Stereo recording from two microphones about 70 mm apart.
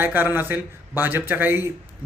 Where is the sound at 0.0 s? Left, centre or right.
Right.